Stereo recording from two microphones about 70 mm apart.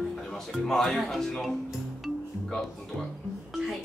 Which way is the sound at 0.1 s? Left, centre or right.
Centre.